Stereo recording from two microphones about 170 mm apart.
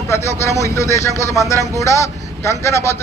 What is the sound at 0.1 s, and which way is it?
Speech, 15° left (ahead or behind).